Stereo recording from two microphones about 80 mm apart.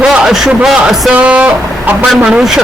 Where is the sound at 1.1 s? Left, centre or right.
Centre.